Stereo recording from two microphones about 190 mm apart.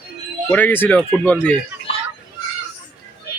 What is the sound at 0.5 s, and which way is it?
Speech, 10° left (ahead or behind).